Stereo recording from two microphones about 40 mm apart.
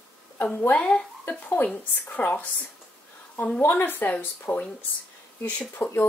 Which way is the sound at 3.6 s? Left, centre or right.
Left.